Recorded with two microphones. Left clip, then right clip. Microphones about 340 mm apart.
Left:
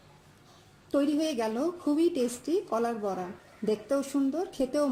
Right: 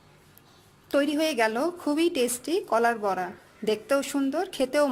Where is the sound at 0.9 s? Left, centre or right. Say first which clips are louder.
Right 4 dB; right.